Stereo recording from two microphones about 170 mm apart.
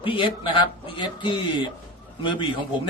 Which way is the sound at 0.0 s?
30° left (ahead or behind).